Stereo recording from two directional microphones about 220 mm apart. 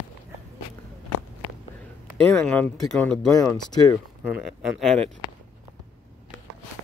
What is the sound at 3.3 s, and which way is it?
Speech, 15° left (ahead or behind).